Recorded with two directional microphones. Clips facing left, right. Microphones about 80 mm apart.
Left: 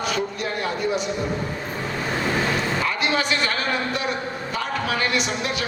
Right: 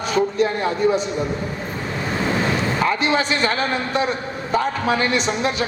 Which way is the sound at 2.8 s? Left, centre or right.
Right.